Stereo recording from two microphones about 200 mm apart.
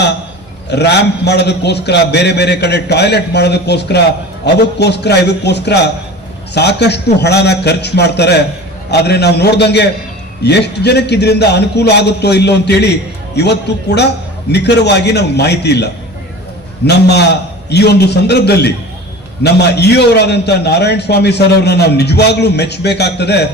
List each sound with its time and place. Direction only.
0.7 s a man's voice: 55° left (ahead or behind)